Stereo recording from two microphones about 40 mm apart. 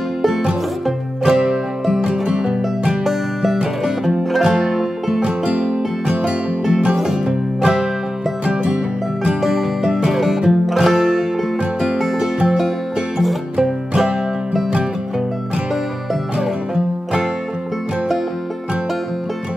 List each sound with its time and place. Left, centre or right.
1.2 s music: centre
3.0 s music: centre
5.2 s music: right
7.0 s music: centre
8.5 s music: right
9.4 s music: centre
16.3 s music: centre